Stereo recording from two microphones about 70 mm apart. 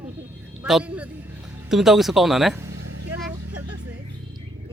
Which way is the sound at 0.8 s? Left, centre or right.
Right.